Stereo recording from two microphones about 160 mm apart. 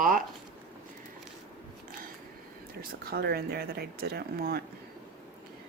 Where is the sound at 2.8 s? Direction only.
75° right (ahead or behind).